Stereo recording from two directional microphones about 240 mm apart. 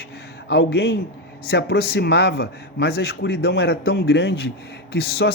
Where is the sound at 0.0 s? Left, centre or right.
Left.